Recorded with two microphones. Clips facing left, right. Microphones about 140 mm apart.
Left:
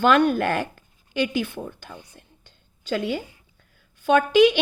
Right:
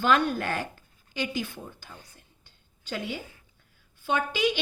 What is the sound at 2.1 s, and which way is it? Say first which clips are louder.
Whispering: left 7 dB; 85° left.